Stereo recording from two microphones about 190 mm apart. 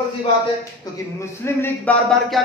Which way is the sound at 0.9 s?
20° left (ahead or behind).